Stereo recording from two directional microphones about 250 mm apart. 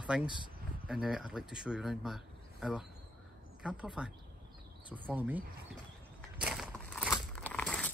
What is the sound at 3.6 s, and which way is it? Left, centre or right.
Speech, centre.